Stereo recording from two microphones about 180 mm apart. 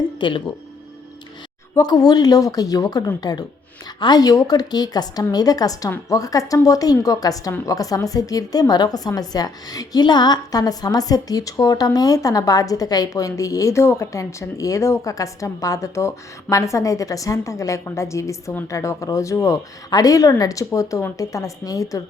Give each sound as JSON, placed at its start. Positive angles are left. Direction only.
{"t": 0.2, "sound": "speech", "side_deg": 25}
{"t": 1.7, "sound": "a woman's voice", "side_deg": 20}